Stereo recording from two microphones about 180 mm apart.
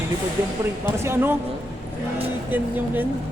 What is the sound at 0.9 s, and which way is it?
Speech, 15° right (ahead or behind).